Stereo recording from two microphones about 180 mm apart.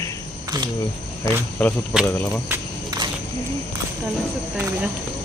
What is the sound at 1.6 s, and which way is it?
Speech, 5° left (ahead or behind).